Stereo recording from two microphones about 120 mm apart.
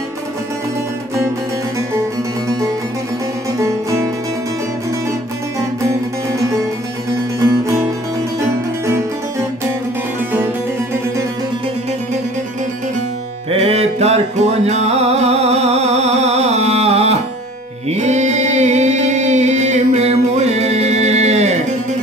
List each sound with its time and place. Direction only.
3.5 s music: 25° right (ahead or behind)
5.6 s music: 25° right (ahead or behind)
8.8 s harpsichord: 25° right (ahead or behind)
13.5 s music: 60° right (ahead or behind)
17.8 s music: 75° right (ahead or behind)